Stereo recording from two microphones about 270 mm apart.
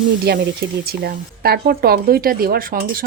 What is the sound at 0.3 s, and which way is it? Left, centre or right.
Speech, right.